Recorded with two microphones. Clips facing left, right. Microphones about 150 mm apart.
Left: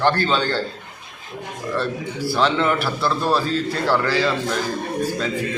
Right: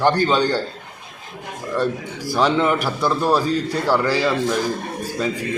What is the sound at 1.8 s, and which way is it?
A man's voice, 15° right (ahead or behind).